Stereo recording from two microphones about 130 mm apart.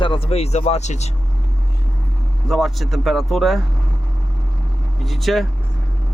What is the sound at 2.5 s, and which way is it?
Speech, centre (ahead or behind).